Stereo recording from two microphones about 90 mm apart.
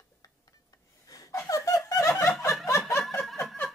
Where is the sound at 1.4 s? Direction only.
35° left (ahead or behind).